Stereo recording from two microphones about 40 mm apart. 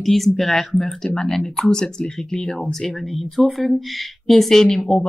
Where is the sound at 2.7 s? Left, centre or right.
Centre.